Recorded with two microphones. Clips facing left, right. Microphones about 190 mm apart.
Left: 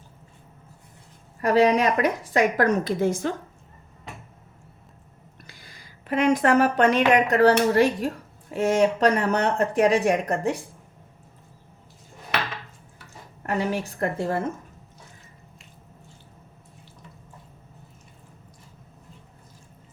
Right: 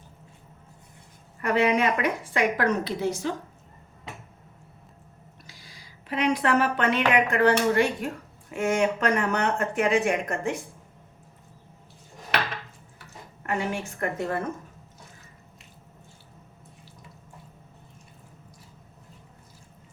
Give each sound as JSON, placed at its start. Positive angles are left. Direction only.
{"t": 1.4, "sound": "speech", "side_deg": 35}
{"t": 5.5, "sound": "a woman's voice", "side_deg": 55}
{"t": 13.4, "sound": "speech", "side_deg": 40}